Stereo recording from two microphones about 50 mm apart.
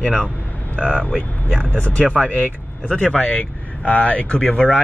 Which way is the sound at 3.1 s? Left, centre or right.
Left.